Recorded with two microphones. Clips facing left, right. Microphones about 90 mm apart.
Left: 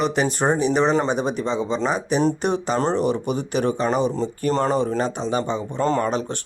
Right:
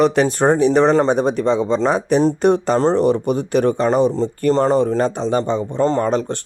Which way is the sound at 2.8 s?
35° right (ahead or behind).